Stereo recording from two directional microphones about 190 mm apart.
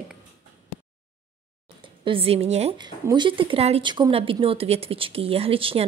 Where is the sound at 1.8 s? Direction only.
30° right (ahead or behind).